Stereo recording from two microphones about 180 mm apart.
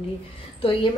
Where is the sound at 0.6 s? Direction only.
30° left (ahead or behind).